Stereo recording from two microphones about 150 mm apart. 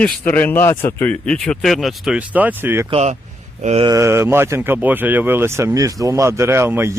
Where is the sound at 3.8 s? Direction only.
20° right (ahead or behind).